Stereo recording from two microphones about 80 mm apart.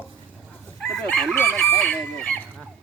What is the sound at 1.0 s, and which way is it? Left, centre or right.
Chicken, centre.